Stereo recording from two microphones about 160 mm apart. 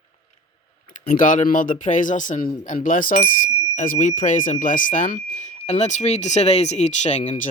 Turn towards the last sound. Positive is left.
turn(degrees=45)  # may be behind; listen again after turning